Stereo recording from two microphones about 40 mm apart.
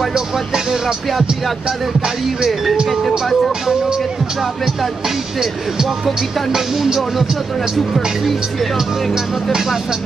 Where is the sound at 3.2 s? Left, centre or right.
Centre.